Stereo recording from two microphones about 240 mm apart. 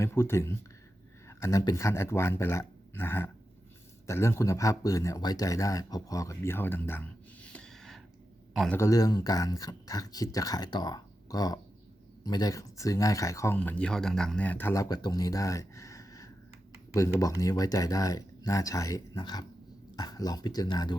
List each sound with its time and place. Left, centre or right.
0.0 s speech: centre